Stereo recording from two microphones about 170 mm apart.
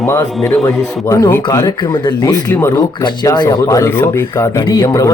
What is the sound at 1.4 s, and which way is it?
Speech, 25° left (ahead or behind).